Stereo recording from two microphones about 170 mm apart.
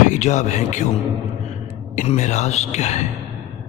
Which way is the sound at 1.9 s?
45° left (ahead or behind).